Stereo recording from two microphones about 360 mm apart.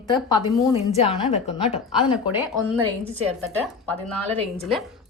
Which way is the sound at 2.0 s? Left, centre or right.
Centre.